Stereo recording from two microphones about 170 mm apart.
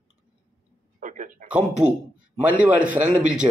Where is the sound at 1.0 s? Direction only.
50° right (ahead or behind).